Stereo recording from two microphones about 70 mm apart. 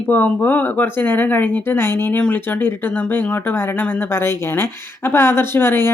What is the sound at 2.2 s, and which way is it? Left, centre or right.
Speech, left.